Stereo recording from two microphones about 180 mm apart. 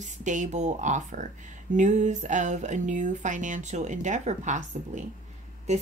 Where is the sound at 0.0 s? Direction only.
45° right (ahead or behind).